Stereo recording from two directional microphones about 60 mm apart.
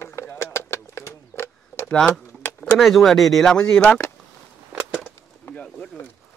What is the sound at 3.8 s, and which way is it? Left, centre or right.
Speech, left.